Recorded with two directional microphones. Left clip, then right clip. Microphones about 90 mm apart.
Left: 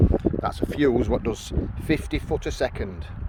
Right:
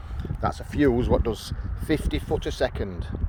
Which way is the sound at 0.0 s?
25° left (ahead or behind).